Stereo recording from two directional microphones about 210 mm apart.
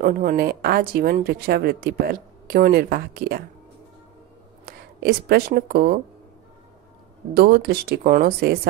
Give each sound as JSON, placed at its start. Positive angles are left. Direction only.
{"t": 0.0, "sound": "speech", "side_deg": -45}
{"t": 4.6, "sound": "speech", "side_deg": -45}
{"t": 7.3, "sound": "speech", "side_deg": -50}